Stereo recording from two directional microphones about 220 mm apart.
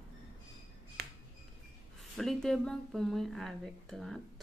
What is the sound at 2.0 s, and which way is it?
A woman's voice, centre (ahead or behind).